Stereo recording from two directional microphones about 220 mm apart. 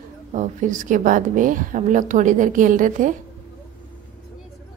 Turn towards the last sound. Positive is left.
turn(degrees=-35)  # may be behind; listen again after turning